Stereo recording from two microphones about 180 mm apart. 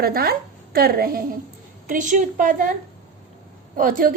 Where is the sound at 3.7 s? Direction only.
50° right (ahead or behind).